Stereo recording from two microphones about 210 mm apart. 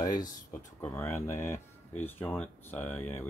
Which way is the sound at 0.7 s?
10° left (ahead or behind).